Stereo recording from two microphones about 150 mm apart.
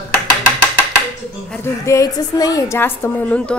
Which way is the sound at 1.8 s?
25° left (ahead or behind).